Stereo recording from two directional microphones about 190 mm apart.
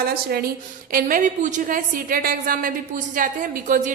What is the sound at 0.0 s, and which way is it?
A woman's voice, 55° right (ahead or behind).